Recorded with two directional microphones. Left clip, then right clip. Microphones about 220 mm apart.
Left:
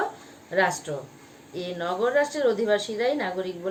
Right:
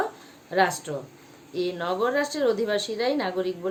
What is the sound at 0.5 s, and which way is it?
Speech, 40° right (ahead or behind).